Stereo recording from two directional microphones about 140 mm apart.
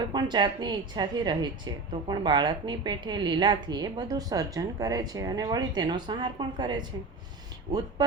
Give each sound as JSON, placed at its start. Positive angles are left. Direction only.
{"t": 0.0, "sound": "a woman's voice", "side_deg": -30}